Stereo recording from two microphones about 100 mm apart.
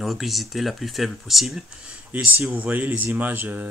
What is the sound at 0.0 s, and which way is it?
Speech, centre (ahead or behind).